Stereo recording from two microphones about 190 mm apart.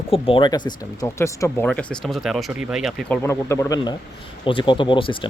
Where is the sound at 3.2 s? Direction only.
15° left (ahead or behind).